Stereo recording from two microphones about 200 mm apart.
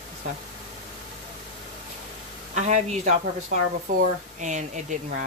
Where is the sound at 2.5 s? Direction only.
35° right (ahead or behind).